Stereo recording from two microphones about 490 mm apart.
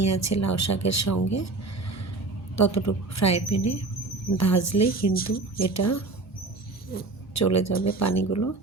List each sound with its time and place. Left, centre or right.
0.0 s speech: left
2.6 s speech: left
5.1 s speech: centre
5.5 s speech: left
6.9 s speech: centre
7.3 s speech: left